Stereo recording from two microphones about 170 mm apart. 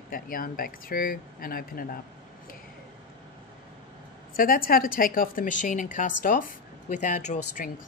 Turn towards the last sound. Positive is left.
turn(degrees=45)  # may be behind; listen again after turning